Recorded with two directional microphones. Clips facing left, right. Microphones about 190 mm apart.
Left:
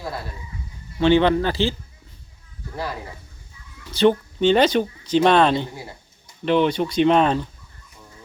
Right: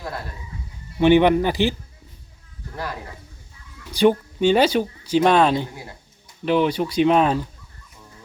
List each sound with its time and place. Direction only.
0.9 s speech: 15° right (ahead or behind)
3.9 s speech: 10° right (ahead or behind)